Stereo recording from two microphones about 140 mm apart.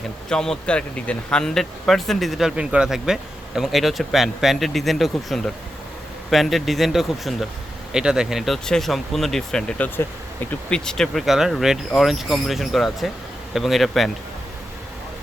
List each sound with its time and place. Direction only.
0.3 s speech: 5° left (ahead or behind)